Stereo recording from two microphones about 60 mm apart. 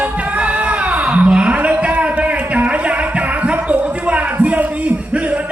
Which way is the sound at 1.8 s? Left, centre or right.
Right.